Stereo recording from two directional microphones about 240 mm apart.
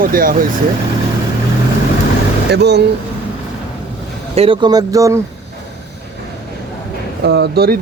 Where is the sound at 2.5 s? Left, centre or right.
Right.